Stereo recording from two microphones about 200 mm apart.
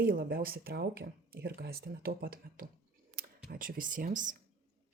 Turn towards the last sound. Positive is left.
turn(degrees=-40)  # may be behind; listen again after turning